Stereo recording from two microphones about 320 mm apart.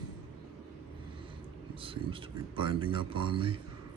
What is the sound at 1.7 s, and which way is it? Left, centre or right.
Speech, centre.